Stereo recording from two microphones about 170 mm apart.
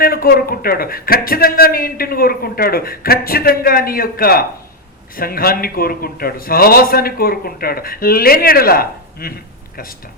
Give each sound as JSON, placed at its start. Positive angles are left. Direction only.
{"t": 0.0, "sound": "a man's voice", "side_deg": 60}